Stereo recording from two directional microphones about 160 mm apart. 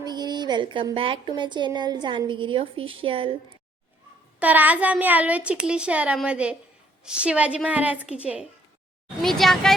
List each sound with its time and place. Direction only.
0.0 s speech: 25° right (ahead or behind)
4.4 s a child's voice: 10° right (ahead or behind)